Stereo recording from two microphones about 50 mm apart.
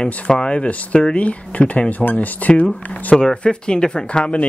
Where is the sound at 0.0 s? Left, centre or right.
Centre.